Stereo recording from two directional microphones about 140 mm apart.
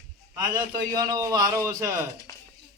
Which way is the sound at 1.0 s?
25° right (ahead or behind).